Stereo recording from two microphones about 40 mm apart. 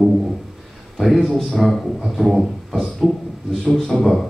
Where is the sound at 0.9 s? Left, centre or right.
Centre.